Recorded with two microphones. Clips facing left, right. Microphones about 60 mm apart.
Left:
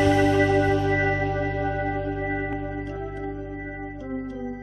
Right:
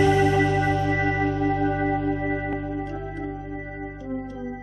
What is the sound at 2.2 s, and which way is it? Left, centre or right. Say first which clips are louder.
Music: right 1 dB; centre.